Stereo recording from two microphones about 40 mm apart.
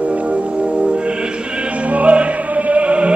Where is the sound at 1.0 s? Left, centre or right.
Right.